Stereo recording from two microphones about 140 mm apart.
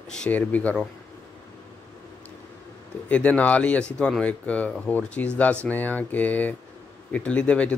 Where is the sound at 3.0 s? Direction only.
10° left (ahead or behind).